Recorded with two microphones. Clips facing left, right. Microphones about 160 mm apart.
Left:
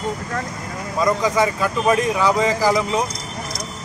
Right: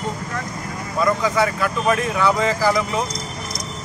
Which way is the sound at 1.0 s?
15° left (ahead or behind).